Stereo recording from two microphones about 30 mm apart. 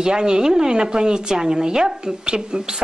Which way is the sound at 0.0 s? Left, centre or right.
Right.